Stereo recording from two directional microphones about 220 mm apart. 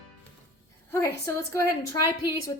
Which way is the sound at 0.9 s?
10° left (ahead or behind).